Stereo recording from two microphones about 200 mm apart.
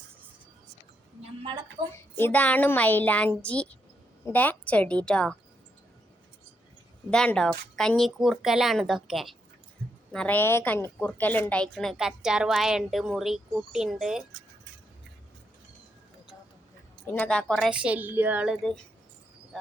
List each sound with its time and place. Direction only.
1.2 s a sound: 25° right (ahead or behind)
2.1 s a woman's voice: 10° left (ahead or behind)
7.1 s speech: 5° left (ahead or behind)
17.1 s speech: 5° left (ahead or behind)